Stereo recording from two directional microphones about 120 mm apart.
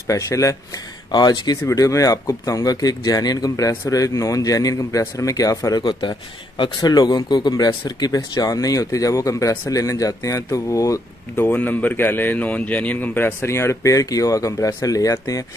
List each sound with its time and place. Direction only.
0.0 s speech: 30° left (ahead or behind)
1.6 s speech: 25° left (ahead or behind)
11.4 s speech: 15° left (ahead or behind); by 15.4 s 30° left (ahead or behind)